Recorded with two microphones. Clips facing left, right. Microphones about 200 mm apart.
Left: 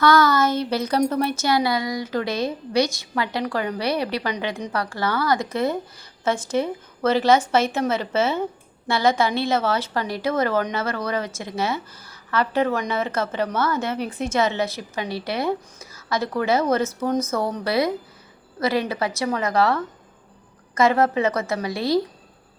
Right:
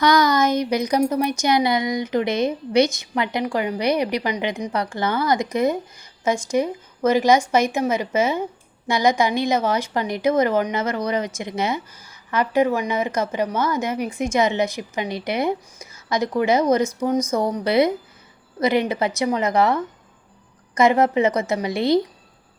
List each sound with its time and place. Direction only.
0.0 s a woman's voice: 15° right (ahead or behind)